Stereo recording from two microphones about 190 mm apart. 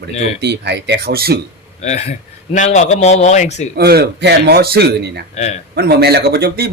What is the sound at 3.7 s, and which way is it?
Speech, 55° right (ahead or behind).